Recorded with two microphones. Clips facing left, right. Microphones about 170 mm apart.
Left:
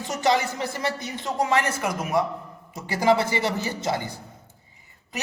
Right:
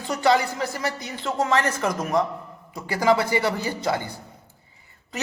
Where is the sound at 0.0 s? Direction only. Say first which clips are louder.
Right 2 dB; 20° left (ahead or behind).